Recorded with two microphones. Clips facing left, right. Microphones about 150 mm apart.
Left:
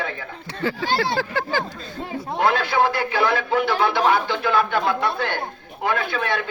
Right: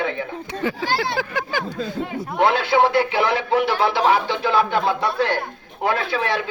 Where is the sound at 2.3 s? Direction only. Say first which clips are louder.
Right 2 dB; 25° right (ahead or behind).